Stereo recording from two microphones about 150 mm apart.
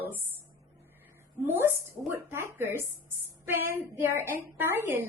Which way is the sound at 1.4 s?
15° right (ahead or behind).